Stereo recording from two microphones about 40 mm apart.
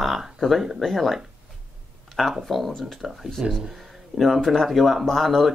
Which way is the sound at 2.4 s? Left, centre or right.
Centre.